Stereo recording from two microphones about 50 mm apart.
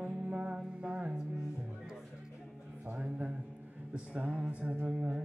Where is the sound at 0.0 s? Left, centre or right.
Right.